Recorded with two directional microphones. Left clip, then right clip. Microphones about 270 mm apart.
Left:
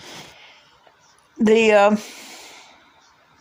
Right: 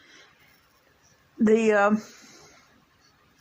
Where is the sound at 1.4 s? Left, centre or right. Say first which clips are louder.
Left 6 dB; left.